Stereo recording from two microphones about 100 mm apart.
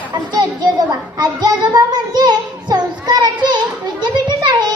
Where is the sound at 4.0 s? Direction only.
50° right (ahead or behind).